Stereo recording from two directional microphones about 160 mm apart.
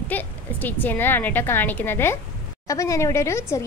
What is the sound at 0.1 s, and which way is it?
A woman's voice, 10° left (ahead or behind).